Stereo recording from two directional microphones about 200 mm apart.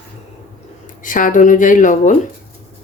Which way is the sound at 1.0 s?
40° left (ahead or behind).